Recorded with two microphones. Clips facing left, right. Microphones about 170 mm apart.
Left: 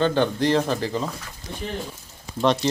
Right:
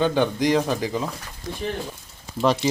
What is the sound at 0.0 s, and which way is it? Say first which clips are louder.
Speech: even; 10° right (ahead or behind).